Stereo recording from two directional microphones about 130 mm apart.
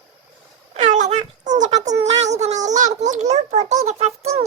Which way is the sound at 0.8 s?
65° right (ahead or behind).